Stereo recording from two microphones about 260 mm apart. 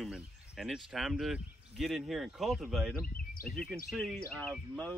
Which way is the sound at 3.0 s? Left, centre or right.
Left.